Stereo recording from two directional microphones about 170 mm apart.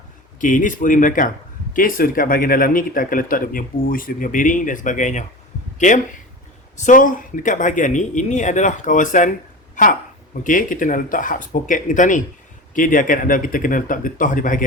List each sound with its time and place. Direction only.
0.3 s speech: 50° left (ahead or behind)